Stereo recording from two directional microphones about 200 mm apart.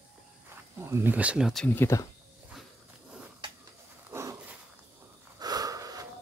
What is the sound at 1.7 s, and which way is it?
Speech, 15° left (ahead or behind).